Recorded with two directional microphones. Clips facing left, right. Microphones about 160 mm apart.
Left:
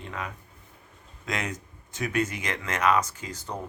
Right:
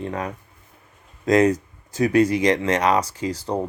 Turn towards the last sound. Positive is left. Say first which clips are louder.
# right 11 dB
turn(degrees=-35)  # may be behind; listen again after turning